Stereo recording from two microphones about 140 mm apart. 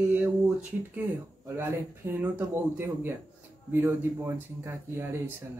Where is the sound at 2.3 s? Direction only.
15° right (ahead or behind).